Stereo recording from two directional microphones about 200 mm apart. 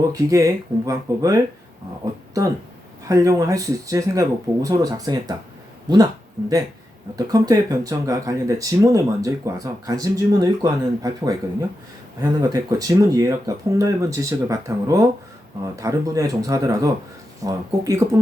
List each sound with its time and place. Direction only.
0.1 s speech: 15° right (ahead or behind)
3.1 s speech: 15° right (ahead or behind)
7.2 s speech: 15° right (ahead or behind)